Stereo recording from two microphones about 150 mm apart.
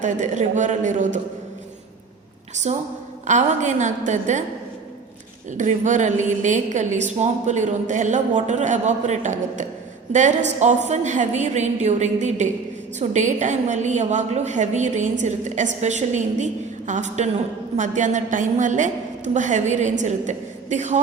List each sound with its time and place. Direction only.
0.0 s a woman's voice: 55° right (ahead or behind)
2.7 s a woman's voice: 50° right (ahead or behind)
5.5 s a woman's voice: 55° right (ahead or behind)